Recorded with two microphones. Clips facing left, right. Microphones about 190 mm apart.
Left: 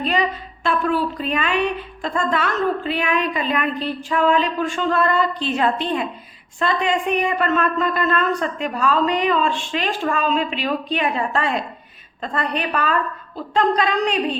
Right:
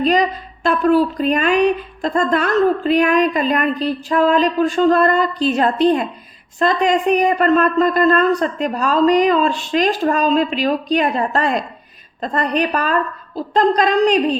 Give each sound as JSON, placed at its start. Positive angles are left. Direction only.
{"t": 0.0, "sound": "a woman's voice", "side_deg": -40}